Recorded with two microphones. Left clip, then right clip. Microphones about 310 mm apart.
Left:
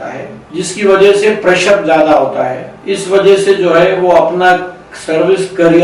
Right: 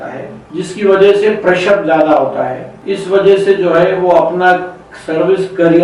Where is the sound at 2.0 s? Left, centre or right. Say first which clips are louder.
Left 2 dB; right.